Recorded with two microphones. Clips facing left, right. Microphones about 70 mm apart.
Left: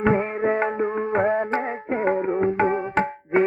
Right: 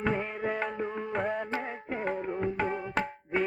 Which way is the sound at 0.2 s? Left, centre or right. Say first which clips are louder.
Left 10 dB; left.